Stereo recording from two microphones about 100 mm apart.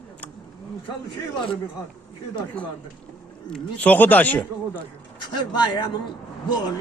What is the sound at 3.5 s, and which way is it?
Speech, 15° left (ahead or behind).